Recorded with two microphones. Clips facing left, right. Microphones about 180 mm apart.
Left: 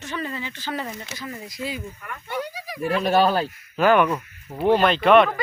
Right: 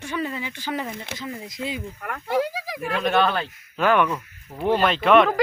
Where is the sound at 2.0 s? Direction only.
80° right.